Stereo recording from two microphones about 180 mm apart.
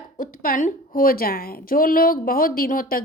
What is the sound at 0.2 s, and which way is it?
A woman's voice, 50° left (ahead or behind).